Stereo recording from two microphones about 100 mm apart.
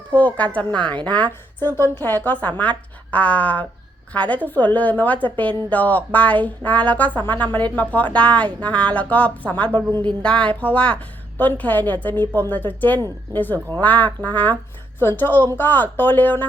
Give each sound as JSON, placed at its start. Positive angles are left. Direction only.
{"t": 0.1, "sound": "speech", "side_deg": 15}